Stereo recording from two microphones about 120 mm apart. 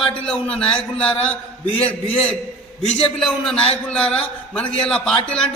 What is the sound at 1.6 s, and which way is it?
Speech, 50° left (ahead or behind).